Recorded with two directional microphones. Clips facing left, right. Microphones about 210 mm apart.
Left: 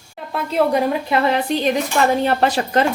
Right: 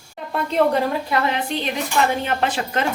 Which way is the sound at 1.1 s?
25° left (ahead or behind).